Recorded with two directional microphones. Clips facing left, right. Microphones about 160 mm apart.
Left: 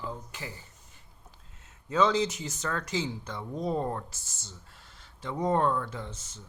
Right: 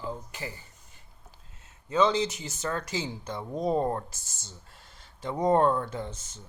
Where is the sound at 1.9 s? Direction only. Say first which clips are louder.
Right 1 dB; centre (ahead or behind); by 4.5 s 15° right (ahead or behind).